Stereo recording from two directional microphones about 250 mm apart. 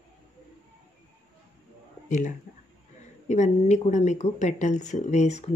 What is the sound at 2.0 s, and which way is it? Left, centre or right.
Speech, left.